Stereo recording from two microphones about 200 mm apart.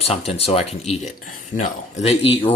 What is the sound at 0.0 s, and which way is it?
Speech, 30° left (ahead or behind).